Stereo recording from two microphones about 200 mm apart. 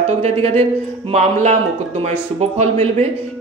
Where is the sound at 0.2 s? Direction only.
30° right (ahead or behind).